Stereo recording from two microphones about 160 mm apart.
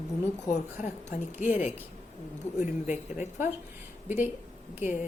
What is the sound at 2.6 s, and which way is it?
Speech, 50° left (ahead or behind).